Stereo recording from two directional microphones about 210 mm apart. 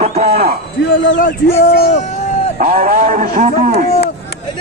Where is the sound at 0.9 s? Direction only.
65° left (ahead or behind).